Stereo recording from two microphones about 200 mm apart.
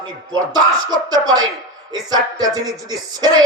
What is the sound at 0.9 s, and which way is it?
Speech, 20° right (ahead or behind).